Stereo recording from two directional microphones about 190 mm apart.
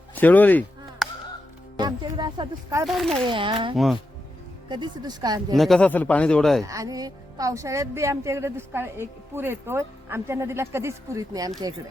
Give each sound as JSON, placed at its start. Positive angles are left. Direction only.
{"t": 0.2, "sound": "a sound", "side_deg": 10}
{"t": 1.7, "sound": "speech", "side_deg": -20}
{"t": 2.8, "sound": "speech", "side_deg": 0}
{"t": 3.2, "sound": "speech", "side_deg": -25}
{"t": 5.5, "sound": "speech", "side_deg": 0}
{"t": 6.7, "sound": "a woman's voice", "side_deg": -20}